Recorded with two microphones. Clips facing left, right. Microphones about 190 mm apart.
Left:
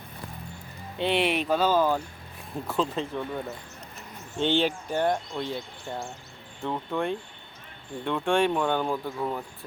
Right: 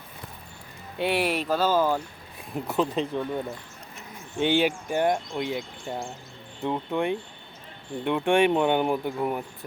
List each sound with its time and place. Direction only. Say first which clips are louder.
0.9 s speech: even; 5° right (ahead or behind)